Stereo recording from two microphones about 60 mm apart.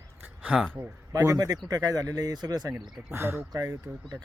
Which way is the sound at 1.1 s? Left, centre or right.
Right.